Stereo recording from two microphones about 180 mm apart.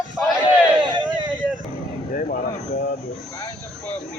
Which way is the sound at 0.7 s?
25° right (ahead or behind).